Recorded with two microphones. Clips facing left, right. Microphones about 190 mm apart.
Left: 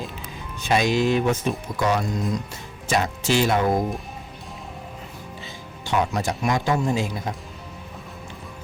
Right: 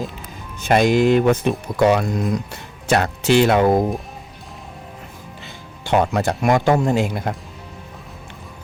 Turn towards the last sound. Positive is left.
turn(degrees=-60)  # may be behind; listen again after turning